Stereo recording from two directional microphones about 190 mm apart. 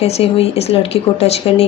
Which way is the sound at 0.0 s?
30° left (ahead or behind).